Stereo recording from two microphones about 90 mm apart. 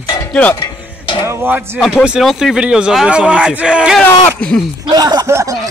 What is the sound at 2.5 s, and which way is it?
Speech, 10° right (ahead or behind).